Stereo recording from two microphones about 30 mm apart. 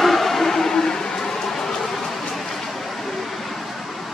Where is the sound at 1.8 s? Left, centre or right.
Centre.